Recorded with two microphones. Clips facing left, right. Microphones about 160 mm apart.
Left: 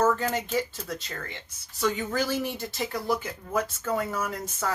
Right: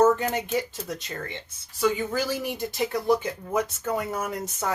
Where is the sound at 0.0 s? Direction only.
15° right (ahead or behind).